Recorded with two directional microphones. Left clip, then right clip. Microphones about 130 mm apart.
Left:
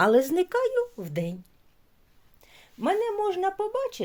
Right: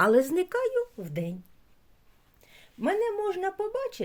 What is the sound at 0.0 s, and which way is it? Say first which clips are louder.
A woman's voice: left 1 dB; 20° left (ahead or behind).